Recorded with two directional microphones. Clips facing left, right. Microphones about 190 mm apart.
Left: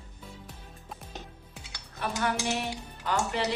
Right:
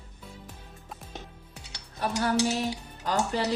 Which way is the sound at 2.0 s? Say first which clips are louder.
Right 3 dB; 40° right (ahead or behind).